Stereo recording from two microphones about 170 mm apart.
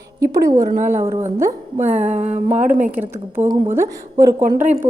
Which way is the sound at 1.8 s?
40° right (ahead or behind).